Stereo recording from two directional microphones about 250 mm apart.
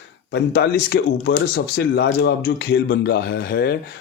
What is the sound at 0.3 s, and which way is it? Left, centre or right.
Speech, left.